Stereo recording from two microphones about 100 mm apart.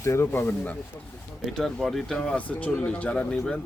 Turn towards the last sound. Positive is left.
turn(degrees=10)  # may be behind; listen again after turning